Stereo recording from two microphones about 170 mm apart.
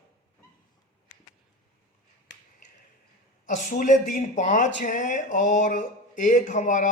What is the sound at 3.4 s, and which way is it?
Speech, 50° left (ahead or behind).